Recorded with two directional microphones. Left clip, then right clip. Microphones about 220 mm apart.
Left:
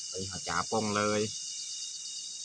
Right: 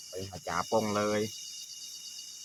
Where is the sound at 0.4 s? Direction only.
5° left (ahead or behind).